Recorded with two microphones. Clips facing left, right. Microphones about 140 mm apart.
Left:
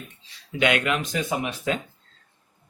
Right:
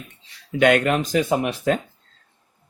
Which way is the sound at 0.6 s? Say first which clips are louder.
Right 6 dB; 45° right (ahead or behind).